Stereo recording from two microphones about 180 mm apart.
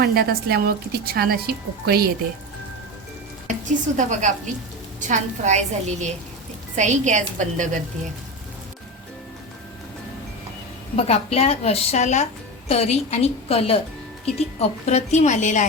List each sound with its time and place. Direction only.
0.0 s a woman's voice: 60° right (ahead or behind)
3.7 s a woman's voice: 45° right (ahead or behind)
10.9 s a woman's voice: 35° left (ahead or behind)